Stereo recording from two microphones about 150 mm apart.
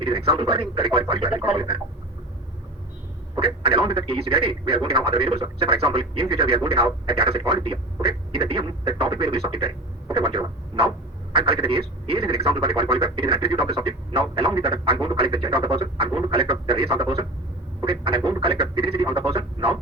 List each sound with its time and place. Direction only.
0.0 s speech: 35° right (ahead or behind)
3.3 s speech: 35° right (ahead or behind)
10.1 s radio: 35° right (ahead or behind)
11.3 s speech: 35° right (ahead or behind)
17.8 s speech: 35° right (ahead or behind)